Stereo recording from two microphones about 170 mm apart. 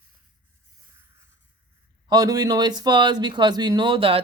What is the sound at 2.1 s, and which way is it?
Speech, 20° right (ahead or behind).